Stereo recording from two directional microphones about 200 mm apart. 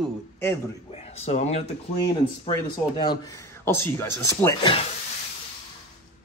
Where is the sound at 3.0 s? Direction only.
20° left (ahead or behind).